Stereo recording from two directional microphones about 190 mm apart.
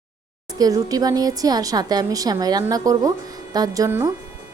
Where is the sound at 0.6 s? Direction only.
20° right (ahead or behind).